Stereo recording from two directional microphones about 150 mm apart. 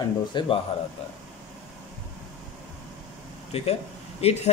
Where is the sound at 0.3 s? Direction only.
30° left (ahead or behind).